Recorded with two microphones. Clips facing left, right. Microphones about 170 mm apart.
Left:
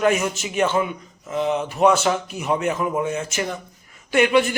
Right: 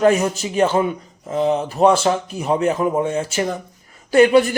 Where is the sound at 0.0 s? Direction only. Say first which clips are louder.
Right 4 dB; 35° right (ahead or behind).